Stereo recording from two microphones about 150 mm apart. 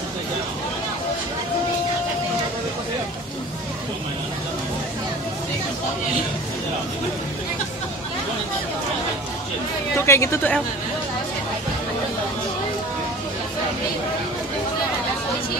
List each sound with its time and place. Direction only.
9.9 s speech: 15° left (ahead or behind)